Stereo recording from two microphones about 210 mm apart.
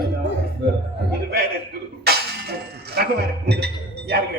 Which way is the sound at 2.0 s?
50° right (ahead or behind).